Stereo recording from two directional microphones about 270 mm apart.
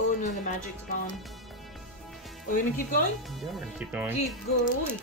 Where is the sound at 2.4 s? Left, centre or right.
Left.